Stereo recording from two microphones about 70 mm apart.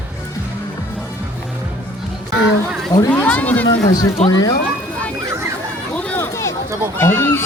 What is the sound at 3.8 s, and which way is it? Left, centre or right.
Speech, left.